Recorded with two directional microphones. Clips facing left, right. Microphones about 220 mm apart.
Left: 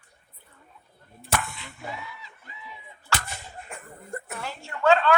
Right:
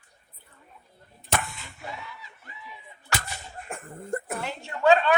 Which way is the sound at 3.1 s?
20° right (ahead or behind).